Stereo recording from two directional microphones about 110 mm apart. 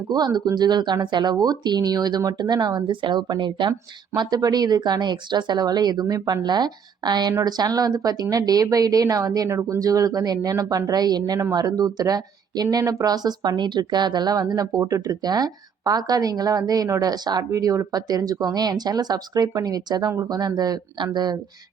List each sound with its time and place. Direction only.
0.1 s speech: 40° right (ahead or behind)